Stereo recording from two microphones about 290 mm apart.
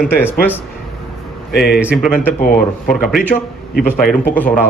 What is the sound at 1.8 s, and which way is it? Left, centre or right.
Speech, centre.